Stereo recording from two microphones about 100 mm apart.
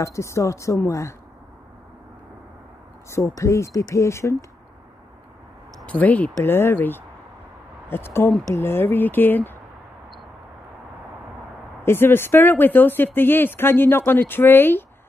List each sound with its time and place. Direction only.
0.0 s speech: 30° left (ahead or behind)
3.1 s speech: 30° left (ahead or behind)
5.9 s speech: 15° left (ahead or behind)
11.8 s speech: 25° left (ahead or behind)